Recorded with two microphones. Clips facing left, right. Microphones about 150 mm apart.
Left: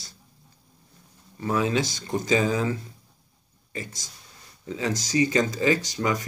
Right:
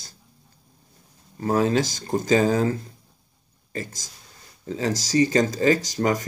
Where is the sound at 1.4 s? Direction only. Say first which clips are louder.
Right 4 dB; 40° right (ahead or behind).